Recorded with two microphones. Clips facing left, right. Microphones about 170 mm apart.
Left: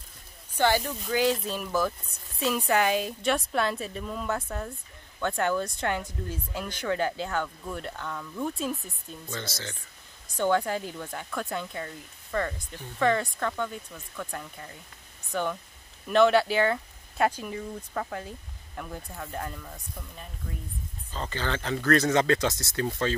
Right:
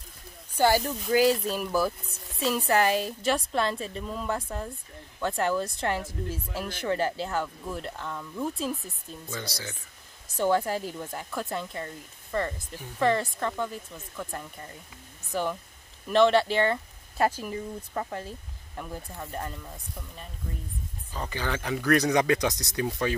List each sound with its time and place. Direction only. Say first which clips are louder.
0.9 s speech: right 3 dB; 5° right (ahead or behind)
9.4 s speech: even; 10° right (ahead or behind)
13.9 s speech: even; 15° right (ahead or behind)
15.3 s speech: even; 5° right (ahead or behind)
18.8 s speech: even; centre (ahead or behind)